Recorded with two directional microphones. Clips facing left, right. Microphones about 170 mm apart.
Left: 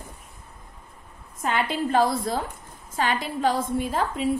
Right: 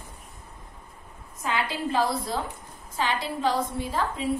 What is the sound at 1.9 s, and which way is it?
A woman's voice, 50° left (ahead or behind).